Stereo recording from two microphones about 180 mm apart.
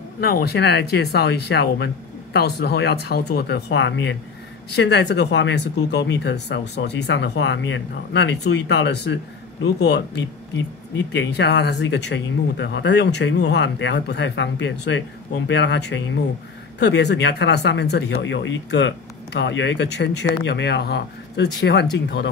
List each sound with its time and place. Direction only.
0.2 s speech: 60° left (ahead or behind); by 4.2 s 90° left
4.7 s speech: 70° left (ahead or behind)